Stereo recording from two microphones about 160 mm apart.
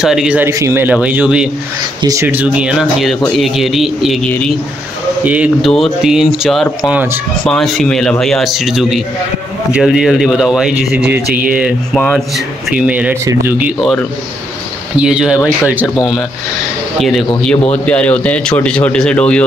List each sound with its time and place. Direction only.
0.0 s speech: 5° right (ahead or behind)
0.5 s speech: 20° right (ahead or behind)
2.0 s speech: 20° right (ahead or behind)
2.2 s speech: 10° right (ahead or behind)
7.4 s speech: centre (ahead or behind)
15.0 s speech: 5° right (ahead or behind)
17.0 s speech: centre (ahead or behind)